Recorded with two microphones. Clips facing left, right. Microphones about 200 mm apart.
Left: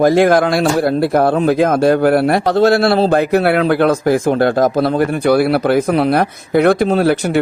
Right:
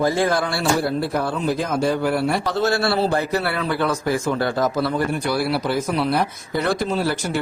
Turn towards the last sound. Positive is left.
turn(degrees=65)  # may be behind; listen again after turning